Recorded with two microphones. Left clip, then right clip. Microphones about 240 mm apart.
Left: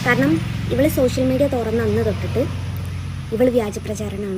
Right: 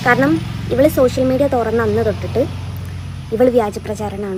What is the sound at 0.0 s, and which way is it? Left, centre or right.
Speech, centre.